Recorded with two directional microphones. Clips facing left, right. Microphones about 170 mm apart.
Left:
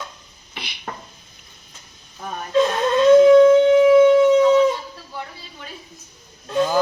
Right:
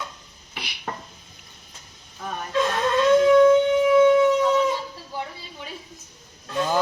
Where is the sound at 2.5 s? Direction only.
20° left (ahead or behind).